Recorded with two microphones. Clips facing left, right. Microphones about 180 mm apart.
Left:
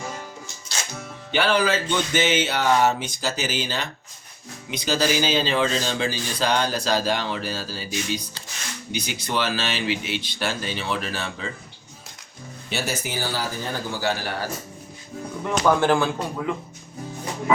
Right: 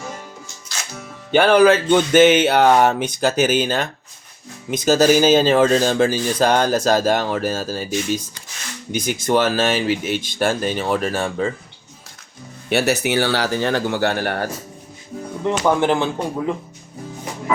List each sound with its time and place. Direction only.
1.3 s a man's voice: 50° right (ahead or behind)
12.7 s speech: 70° right (ahead or behind)
15.4 s speech: 20° right (ahead or behind)